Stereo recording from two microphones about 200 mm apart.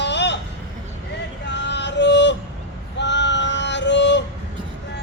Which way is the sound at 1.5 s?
60° left (ahead or behind).